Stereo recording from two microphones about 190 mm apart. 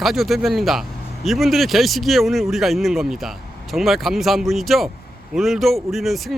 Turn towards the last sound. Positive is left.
turn(degrees=0)  # may be behind; listen again after turning